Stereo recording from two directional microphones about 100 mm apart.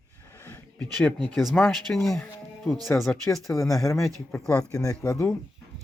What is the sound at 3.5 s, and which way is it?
Speech, 35° left (ahead or behind).